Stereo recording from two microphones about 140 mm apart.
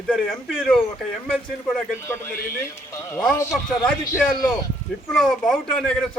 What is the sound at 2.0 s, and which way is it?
Speech, 15° left (ahead or behind).